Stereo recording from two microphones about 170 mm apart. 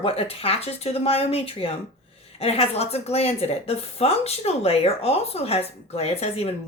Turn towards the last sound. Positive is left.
turn(degrees=35)  # may be behind; listen again after turning